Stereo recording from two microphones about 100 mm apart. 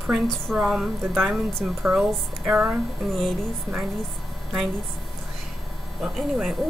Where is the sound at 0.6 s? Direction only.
5° right (ahead or behind).